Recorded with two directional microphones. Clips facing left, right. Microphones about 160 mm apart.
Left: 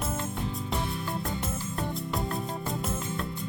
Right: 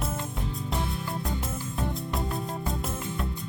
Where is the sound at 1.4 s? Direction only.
Centre (ahead or behind).